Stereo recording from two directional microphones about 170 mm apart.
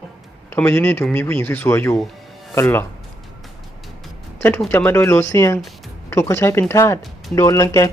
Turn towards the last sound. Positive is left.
turn(degrees=20)  # may be behind; listen again after turning